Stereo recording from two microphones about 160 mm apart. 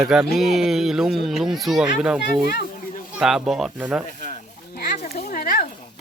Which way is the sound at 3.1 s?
Centre (ahead or behind).